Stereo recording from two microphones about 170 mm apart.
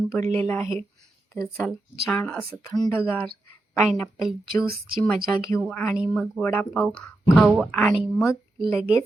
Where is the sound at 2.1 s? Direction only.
10° left (ahead or behind).